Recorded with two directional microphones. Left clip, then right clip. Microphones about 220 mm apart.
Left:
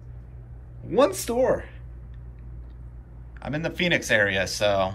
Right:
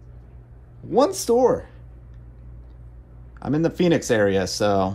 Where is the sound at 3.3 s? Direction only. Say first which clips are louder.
Right 6 dB; 25° right (ahead or behind).